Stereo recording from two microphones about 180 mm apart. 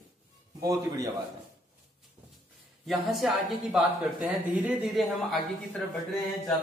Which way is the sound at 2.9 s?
Centre (ahead or behind).